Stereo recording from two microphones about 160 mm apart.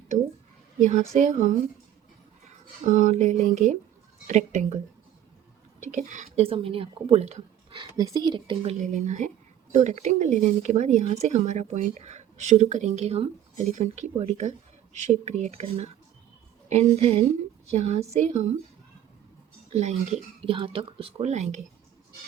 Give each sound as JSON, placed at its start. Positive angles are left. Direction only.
{"t": 0.8, "sound": "speech", "side_deg": -50}
{"t": 2.8, "sound": "speech", "side_deg": -50}
{"t": 5.9, "sound": "speech", "side_deg": -50}
{"t": 7.8, "sound": "speech", "side_deg": -25}
{"t": 8.8, "sound": "speech", "side_deg": -50}
{"t": 19.7, "sound": "speech", "side_deg": -45}